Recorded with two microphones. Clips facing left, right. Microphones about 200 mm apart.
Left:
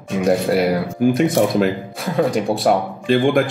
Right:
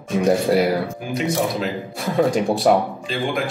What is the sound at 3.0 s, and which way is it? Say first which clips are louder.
Speech: left 8 dB; 55° left (ahead or behind).